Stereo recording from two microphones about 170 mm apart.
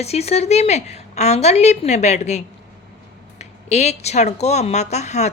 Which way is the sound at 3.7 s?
40° left (ahead or behind).